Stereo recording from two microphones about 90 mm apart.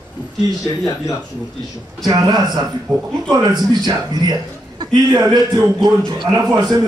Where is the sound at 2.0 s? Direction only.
45° right (ahead or behind).